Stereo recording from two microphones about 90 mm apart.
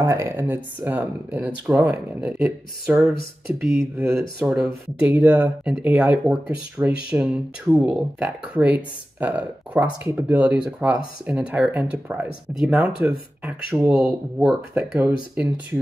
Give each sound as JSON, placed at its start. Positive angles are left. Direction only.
{"t": 0.0, "sound": "speech", "side_deg": -30}
{"t": 4.0, "sound": "speech", "side_deg": -10}